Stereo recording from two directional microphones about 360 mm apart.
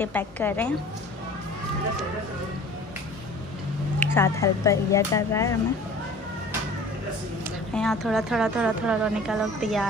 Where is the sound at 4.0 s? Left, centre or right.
Centre.